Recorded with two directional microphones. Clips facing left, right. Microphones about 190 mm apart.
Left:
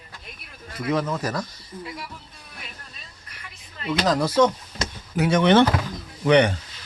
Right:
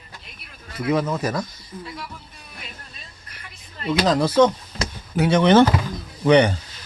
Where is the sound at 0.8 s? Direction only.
15° right (ahead or behind).